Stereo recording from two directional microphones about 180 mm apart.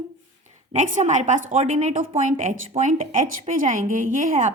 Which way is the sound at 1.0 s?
40° right (ahead or behind).